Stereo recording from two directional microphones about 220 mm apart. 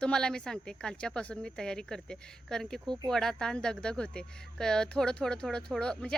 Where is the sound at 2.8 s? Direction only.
20° right (ahead or behind).